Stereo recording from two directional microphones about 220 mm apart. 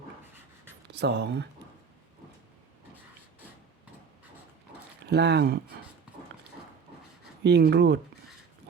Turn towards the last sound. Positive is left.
turn(degrees=-50)  # may be behind; listen again after turning